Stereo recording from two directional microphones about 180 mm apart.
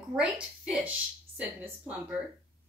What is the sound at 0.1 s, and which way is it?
A woman's voice, 5° right (ahead or behind).